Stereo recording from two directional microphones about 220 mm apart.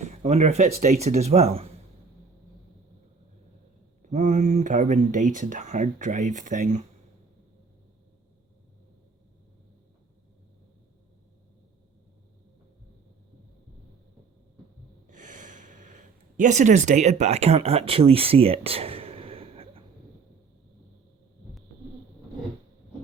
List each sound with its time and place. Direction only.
0.2 s speech: 30° right (ahead or behind)
4.0 s speech: 30° right (ahead or behind)
15.0 s sigh: 35° right (ahead or behind)